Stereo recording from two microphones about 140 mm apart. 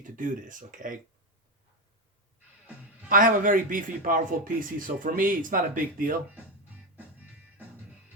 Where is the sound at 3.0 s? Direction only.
75° right (ahead or behind).